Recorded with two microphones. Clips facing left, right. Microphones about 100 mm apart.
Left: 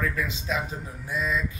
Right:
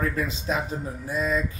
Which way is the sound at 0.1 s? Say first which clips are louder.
Right 2 dB; 40° right (ahead or behind).